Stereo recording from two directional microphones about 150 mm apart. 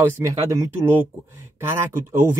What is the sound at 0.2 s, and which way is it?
Speech, 20° right (ahead or behind).